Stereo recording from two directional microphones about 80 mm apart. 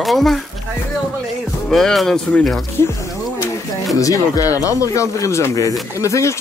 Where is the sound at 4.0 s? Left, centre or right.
Left.